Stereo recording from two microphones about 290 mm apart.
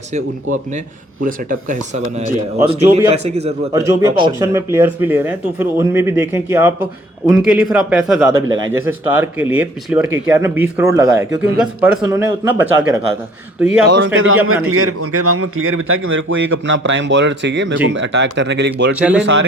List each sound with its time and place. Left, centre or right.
1.2 s speech: right
3.7 s a man's voice: centre
13.9 s a man's voice: right
18.9 s a man's voice: centre
19.2 s a man's voice: right